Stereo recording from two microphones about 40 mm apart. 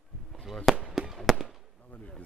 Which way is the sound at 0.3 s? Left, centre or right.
Centre.